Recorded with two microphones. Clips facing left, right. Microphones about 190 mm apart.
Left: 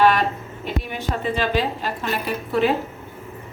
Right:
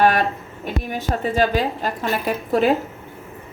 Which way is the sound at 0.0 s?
45° right (ahead or behind).